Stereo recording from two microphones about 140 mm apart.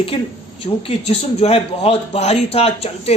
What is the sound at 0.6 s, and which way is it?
Speech, 45° left (ahead or behind).